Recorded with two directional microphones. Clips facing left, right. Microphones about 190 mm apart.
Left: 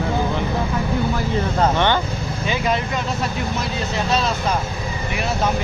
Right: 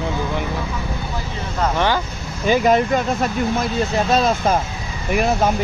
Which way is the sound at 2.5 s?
50° right (ahead or behind).